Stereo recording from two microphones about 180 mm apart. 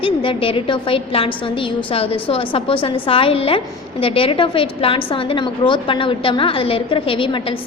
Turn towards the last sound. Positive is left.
turn(degrees=30)  # may be behind; listen again after turning